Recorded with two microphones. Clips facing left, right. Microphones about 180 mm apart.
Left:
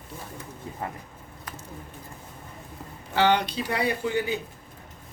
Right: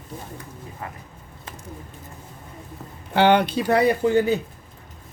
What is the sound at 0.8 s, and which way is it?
Speech, 30° left (ahead or behind).